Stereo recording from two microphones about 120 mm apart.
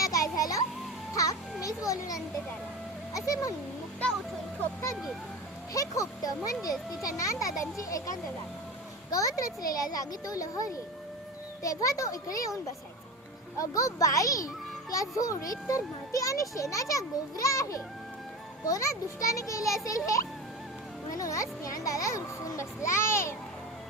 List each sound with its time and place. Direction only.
0.0 s music: 30° left (ahead or behind)
1.6 s a sound: 30° left (ahead or behind)
3.1 s speech: 30° left (ahead or behind)
5.7 s a child's voice: 30° left (ahead or behind)
13.6 s a child's voice: 25° left (ahead or behind)
21.2 s a child's voice: 25° left (ahead or behind)